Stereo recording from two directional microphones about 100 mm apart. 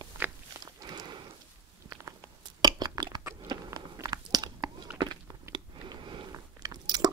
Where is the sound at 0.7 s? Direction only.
45° right (ahead or behind).